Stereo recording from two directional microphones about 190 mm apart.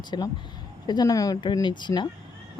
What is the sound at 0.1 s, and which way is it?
Speech, 25° left (ahead or behind).